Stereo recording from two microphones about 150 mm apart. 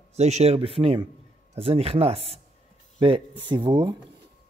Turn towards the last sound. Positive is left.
turn(degrees=-30)  # may be behind; listen again after turning